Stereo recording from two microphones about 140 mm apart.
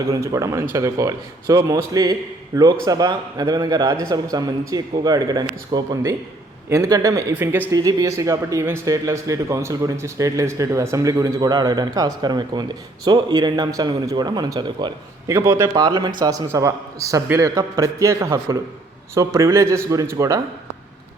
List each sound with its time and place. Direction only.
0.1 s a woman's voice: 25° right (ahead or behind)
7.7 s speech: 25° right (ahead or behind)